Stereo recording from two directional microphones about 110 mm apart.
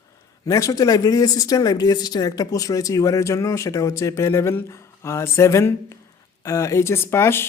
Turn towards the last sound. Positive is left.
turn(degrees=20)  # may be behind; listen again after turning